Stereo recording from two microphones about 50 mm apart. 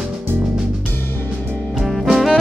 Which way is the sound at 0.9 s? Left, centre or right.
Left.